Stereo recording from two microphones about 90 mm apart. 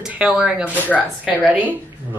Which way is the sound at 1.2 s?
15° right (ahead or behind).